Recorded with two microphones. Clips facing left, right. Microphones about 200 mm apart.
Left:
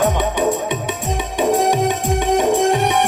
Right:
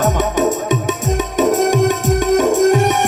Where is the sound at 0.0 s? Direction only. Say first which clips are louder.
Right 2 dB; 45° right (ahead or behind).